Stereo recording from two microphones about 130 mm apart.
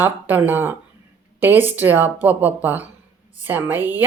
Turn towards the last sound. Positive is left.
turn(degrees=-15)  # may be behind; listen again after turning